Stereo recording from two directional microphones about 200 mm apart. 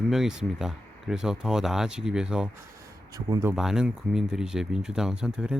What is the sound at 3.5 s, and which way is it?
Speech, centre (ahead or behind).